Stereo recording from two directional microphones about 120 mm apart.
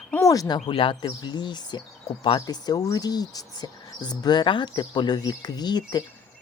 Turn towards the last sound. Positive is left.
turn(degrees=35)  # may be behind; listen again after turning